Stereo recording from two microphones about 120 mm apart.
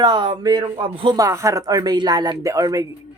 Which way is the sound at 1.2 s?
25° right (ahead or behind).